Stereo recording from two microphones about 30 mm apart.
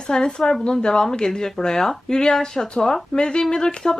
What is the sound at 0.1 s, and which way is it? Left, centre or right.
Speech, left.